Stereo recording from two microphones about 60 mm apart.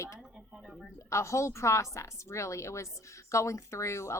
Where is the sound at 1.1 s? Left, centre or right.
Left.